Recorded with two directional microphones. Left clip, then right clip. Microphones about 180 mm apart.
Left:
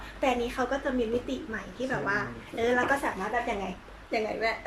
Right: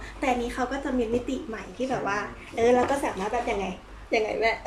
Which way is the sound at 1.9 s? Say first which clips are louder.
Right 1 dB; 10° right (ahead or behind).